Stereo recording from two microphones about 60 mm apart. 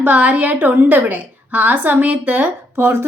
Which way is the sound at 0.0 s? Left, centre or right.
Right.